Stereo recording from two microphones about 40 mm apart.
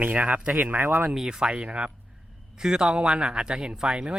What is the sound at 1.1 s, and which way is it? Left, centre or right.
Speech, centre.